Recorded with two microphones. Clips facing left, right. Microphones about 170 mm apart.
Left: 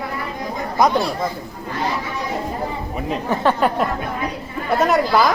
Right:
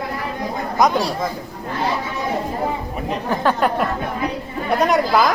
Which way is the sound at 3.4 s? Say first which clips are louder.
Even; centre (ahead or behind).